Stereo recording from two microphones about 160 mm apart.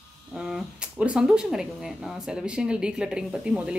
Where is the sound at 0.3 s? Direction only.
5° right (ahead or behind).